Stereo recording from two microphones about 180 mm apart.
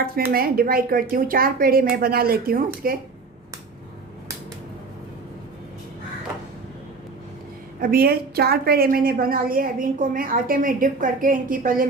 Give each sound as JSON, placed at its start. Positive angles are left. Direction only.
{"t": 0.3, "sound": "a woman's voice", "side_deg": -55}
{"t": 7.8, "sound": "a woman's voice", "side_deg": -55}